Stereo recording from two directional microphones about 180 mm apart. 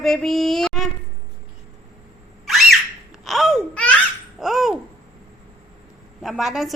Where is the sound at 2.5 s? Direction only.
Centre (ahead or behind).